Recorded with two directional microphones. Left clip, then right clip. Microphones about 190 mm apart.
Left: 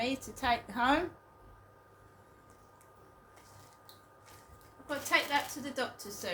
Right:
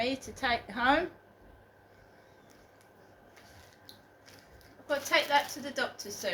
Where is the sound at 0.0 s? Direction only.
45° left (ahead or behind).